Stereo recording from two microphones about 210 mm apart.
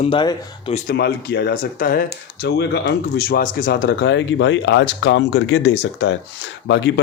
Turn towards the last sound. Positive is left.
turn(degrees=55)  # may be behind; listen again after turning